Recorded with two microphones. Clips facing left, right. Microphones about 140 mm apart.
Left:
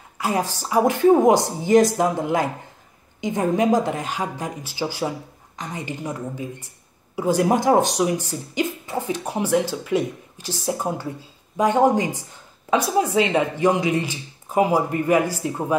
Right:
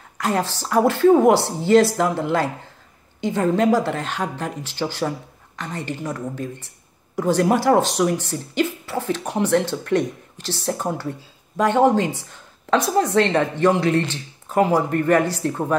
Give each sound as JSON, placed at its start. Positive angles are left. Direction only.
{"t": 0.2, "sound": "speech", "side_deg": 10}